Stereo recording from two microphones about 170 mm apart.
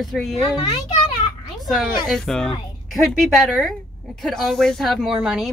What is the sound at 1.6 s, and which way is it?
Speech, centre (ahead or behind).